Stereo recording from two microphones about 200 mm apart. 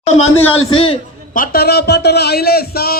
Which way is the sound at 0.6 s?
30° left (ahead or behind).